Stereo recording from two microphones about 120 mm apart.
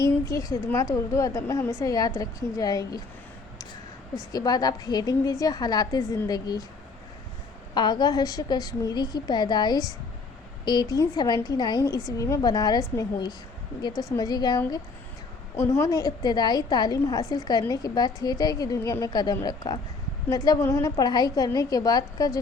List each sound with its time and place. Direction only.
0.0 s a woman's voice: 30° left (ahead or behind)
4.3 s a woman's voice: 35° left (ahead or behind)
7.7 s a woman's voice: 35° left (ahead or behind); by 20.9 s 20° left (ahead or behind)
20.9 s a woman's voice: 35° left (ahead or behind)